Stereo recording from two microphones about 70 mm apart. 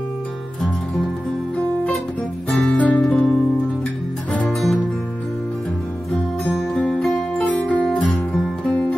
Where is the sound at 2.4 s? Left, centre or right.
Centre.